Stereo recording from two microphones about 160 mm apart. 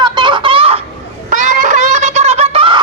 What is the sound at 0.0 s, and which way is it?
Chicken, 30° right (ahead or behind).